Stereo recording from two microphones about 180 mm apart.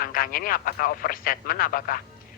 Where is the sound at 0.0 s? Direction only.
55° left (ahead or behind).